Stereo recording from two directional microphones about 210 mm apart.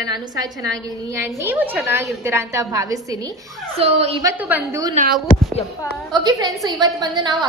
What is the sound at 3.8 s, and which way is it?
Speech, 30° right (ahead or behind).